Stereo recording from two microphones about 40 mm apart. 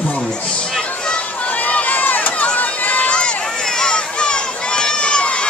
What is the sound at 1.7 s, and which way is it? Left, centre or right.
Run, left.